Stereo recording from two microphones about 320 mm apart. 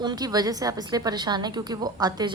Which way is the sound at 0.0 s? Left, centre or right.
Centre.